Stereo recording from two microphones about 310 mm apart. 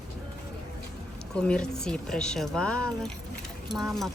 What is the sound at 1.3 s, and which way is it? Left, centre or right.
Speech, centre.